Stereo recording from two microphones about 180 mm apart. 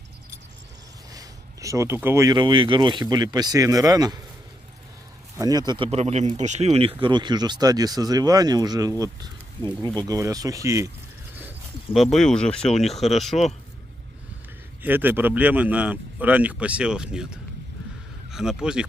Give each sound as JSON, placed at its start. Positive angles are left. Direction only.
{"t": 1.1, "sound": "speech", "side_deg": -15}
{"t": 5.4, "sound": "speech", "side_deg": -20}
{"t": 14.8, "sound": "speech", "side_deg": -10}